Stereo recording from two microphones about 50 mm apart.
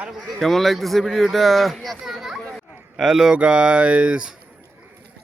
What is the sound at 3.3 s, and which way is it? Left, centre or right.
Speech, right.